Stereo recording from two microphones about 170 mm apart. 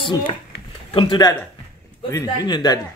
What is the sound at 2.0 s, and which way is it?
Speech, 20° left (ahead or behind).